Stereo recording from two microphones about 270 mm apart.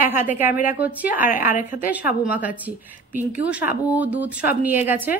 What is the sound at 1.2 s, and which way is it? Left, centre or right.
Speech, left.